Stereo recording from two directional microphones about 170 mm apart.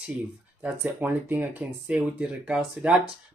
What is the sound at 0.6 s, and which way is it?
Speech, 10° right (ahead or behind).